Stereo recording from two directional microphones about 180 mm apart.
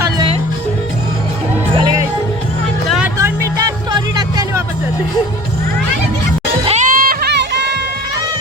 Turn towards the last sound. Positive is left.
turn(degrees=-70)  # may be behind; listen again after turning